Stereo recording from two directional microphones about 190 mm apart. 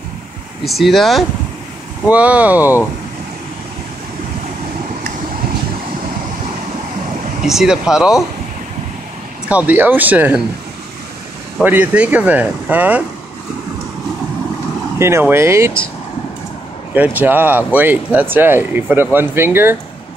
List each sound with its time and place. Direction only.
0.7 s speech: centre (ahead or behind)
7.4 s speech: centre (ahead or behind)
9.5 s speech: 10° right (ahead or behind)
11.6 s speech: 10° right (ahead or behind)
15.0 s speech: 15° right (ahead or behind)
16.9 s speech: 10° right (ahead or behind)